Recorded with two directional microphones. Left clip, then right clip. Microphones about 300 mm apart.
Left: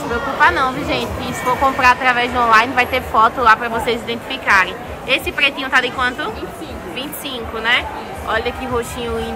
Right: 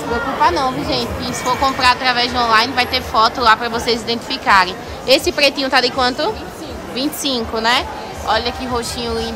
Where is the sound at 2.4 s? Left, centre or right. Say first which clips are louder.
Left 3 dB; centre.